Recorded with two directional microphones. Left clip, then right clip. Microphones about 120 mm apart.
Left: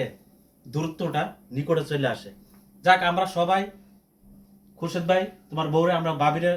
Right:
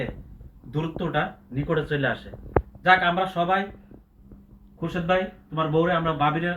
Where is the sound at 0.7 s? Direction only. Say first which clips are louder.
Right 1 dB; 20° left (ahead or behind).